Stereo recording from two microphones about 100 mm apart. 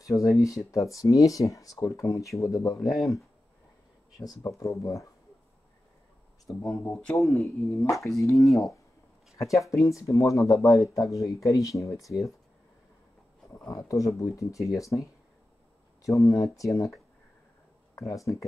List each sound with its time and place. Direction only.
0.0 s speech: 35° left (ahead or behind)
4.2 s speech: 35° left (ahead or behind)
6.6 s a man's voice: 15° left (ahead or behind)
7.4 s speech: 30° left (ahead or behind)
13.7 s speech: 35° left (ahead or behind)
17.9 s speech: 35° left (ahead or behind)